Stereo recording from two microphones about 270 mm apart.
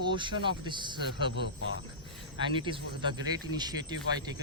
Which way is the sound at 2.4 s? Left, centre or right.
Centre.